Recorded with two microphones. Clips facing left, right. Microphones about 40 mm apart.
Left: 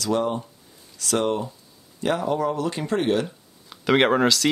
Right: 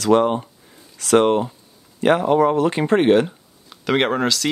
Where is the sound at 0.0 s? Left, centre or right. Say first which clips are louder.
Right 7 dB; right.